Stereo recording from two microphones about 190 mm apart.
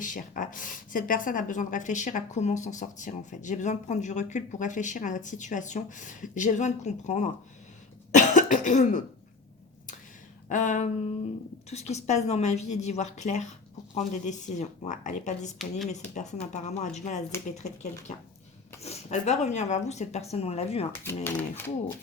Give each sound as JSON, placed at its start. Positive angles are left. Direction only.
{"t": 0.0, "sound": "a woman's voice", "side_deg": 45}
{"t": 8.1, "sound": "cough", "side_deg": 40}
{"t": 10.5, "sound": "a woman's voice", "side_deg": 40}
{"t": 18.8, "sound": "a woman's voice", "side_deg": 35}
{"t": 21.2, "sound": "speech", "side_deg": 10}